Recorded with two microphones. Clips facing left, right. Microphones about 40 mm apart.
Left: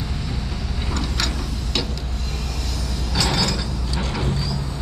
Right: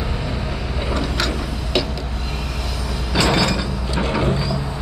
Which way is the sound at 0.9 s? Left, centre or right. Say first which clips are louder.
Right 3 dB; centre.